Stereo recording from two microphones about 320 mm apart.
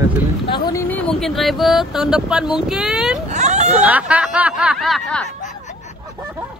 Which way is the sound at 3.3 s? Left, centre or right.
Right.